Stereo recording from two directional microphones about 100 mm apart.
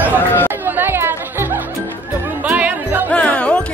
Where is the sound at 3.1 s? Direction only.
10° left (ahead or behind).